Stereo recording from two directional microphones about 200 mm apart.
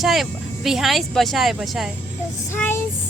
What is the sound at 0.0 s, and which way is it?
Speech, centre (ahead or behind).